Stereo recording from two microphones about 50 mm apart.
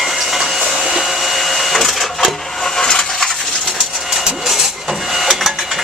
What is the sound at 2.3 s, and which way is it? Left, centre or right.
Steam, centre.